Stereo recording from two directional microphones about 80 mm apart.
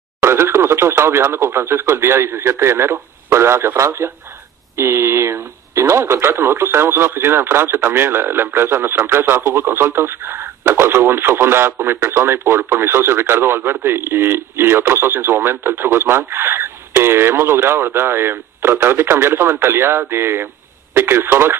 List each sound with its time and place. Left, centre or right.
0.2 s speech: right